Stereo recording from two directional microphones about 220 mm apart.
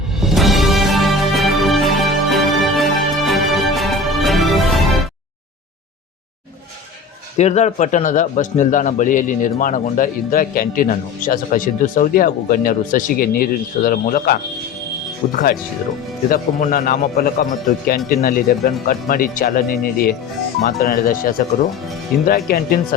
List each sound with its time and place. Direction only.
0.2 s music: centre (ahead or behind)
7.3 s a man's voice: 30° left (ahead or behind)
22.4 s a man's voice: 40° left (ahead or behind)